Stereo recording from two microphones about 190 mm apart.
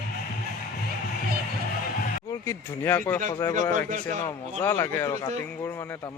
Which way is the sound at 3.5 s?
40° right (ahead or behind).